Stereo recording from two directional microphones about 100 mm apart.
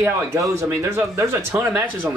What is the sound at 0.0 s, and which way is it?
A man's voice, 25° right (ahead or behind).